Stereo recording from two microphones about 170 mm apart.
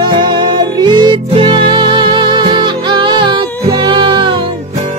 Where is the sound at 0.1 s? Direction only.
25° right (ahead or behind).